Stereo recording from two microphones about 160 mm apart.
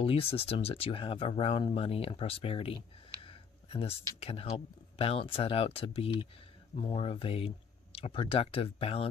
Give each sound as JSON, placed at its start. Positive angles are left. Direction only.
{"t": 0.0, "sound": "speech", "side_deg": 35}
{"t": 3.3, "sound": "a sound", "side_deg": 35}
{"t": 4.2, "sound": "speech", "side_deg": 40}